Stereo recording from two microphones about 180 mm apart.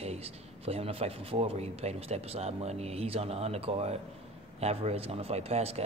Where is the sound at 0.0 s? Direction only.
35° right (ahead or behind).